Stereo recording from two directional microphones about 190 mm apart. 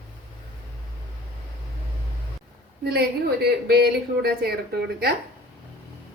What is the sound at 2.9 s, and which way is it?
Speech, 55° right (ahead or behind).